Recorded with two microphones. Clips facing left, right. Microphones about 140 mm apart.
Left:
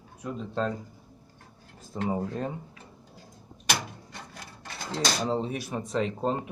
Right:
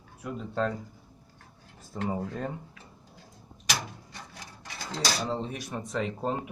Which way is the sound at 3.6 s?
60° left (ahead or behind).